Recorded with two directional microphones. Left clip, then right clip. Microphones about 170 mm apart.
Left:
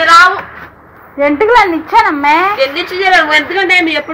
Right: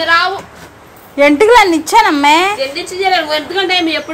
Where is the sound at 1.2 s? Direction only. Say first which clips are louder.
Right 1 dB; 80° right.